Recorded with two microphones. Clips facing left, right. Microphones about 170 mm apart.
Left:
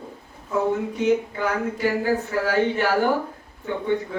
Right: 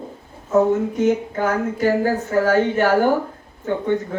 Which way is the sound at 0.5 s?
45° right (ahead or behind).